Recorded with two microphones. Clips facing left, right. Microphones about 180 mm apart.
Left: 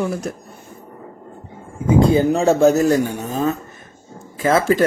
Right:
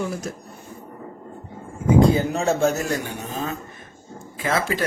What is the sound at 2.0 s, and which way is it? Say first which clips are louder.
Speech: left 5 dB; 30° left (ahead or behind).